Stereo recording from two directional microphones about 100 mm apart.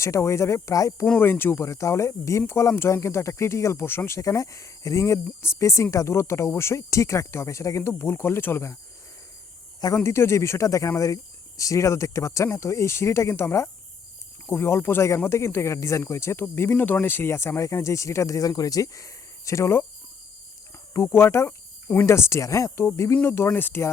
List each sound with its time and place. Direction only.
0.0 s speech: 30° left (ahead or behind)
1.2 s speech: 20° left (ahead or behind)
9.8 s speech: 30° left (ahead or behind)
20.9 s speech: 30° left (ahead or behind)